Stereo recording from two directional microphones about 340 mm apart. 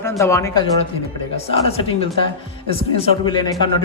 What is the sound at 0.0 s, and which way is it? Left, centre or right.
Speech, centre.